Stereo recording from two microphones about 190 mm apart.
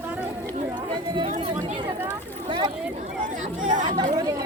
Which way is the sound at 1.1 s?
30° right (ahead or behind).